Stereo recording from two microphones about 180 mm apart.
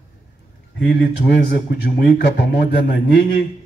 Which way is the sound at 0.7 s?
65° left (ahead or behind).